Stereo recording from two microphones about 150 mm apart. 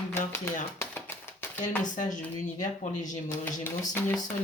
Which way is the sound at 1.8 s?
55° left (ahead or behind).